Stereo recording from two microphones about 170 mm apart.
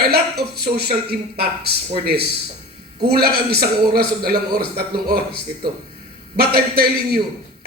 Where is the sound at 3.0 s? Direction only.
65° right (ahead or behind).